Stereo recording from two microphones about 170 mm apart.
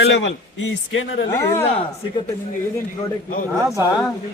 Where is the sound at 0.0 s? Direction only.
90° left.